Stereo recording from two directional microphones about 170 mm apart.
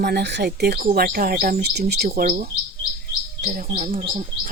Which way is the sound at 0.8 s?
55° right (ahead or behind).